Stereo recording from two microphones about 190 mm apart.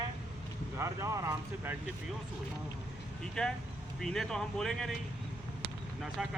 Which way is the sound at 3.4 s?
Centre (ahead or behind).